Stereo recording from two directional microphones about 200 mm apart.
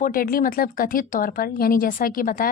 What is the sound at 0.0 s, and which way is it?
Speech, 45° left (ahead or behind).